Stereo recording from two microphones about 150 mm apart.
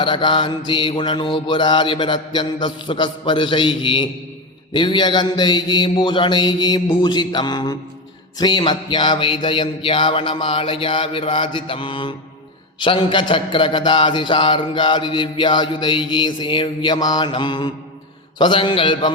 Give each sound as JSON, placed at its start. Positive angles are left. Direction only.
{"t": 0.0, "sound": "a man's voice", "side_deg": 35}
{"t": 4.7, "sound": "mantra", "side_deg": 30}
{"t": 8.4, "sound": "a man's voice", "side_deg": 30}